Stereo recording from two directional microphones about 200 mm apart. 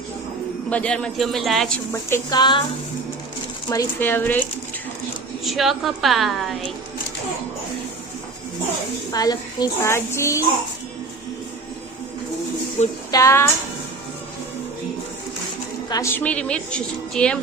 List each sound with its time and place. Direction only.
0.7 s a woman's voice: 5° left (ahead or behind)
1.9 s speech: 15° left (ahead or behind)
3.7 s a woman's voice: 15° left (ahead or behind)
5.5 s a woman's voice: centre (ahead or behind)
9.1 s a woman's voice: 20° left (ahead or behind)
13.1 s speech: 15° left (ahead or behind)
15.9 s a woman's voice: 15° left (ahead or behind)